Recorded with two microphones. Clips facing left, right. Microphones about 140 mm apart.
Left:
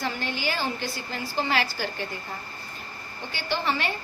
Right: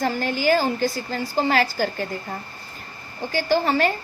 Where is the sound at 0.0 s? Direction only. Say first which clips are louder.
Right 8 dB; 45° right (ahead or behind).